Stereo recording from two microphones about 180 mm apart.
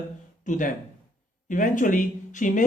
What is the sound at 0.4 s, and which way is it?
Speech, 45° left (ahead or behind).